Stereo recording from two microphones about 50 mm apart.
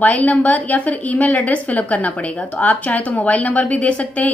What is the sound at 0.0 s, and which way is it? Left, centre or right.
A woman's voice, left.